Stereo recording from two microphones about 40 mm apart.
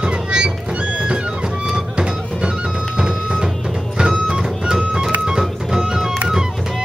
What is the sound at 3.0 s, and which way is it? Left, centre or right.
Music, centre.